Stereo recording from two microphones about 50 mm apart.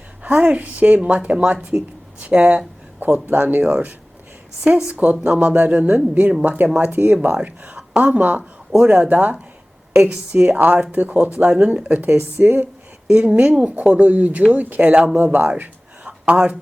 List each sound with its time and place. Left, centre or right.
0.2 s a woman's voice: right
13.1 s a woman's voice: right
16.0 s a sound: right